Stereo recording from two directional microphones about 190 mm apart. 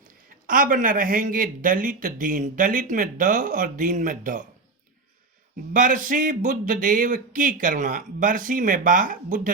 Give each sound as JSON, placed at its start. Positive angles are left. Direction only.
{"t": 0.3, "sound": "speech", "side_deg": -45}
{"t": 5.7, "sound": "speech", "side_deg": -45}